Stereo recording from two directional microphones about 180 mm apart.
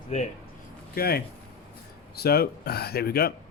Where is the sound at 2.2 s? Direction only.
60° left (ahead or behind).